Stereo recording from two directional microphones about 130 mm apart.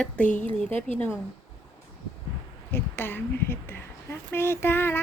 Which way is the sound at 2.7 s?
15° left (ahead or behind).